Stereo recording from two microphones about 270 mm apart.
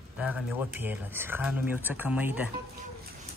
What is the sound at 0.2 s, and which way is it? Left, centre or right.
Speech, centre.